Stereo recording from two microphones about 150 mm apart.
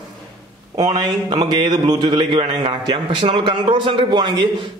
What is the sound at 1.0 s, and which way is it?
A man's voice, 30° right (ahead or behind).